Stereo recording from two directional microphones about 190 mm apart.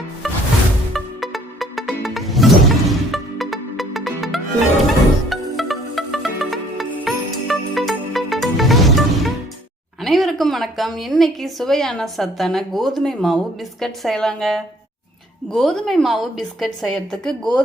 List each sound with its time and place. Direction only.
0.9 s music: centre (ahead or behind)
10.0 s a woman's voice: centre (ahead or behind)